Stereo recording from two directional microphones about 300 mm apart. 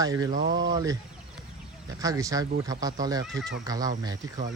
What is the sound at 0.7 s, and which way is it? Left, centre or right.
Speech, centre.